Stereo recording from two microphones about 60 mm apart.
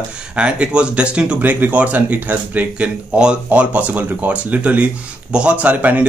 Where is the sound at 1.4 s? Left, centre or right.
Right.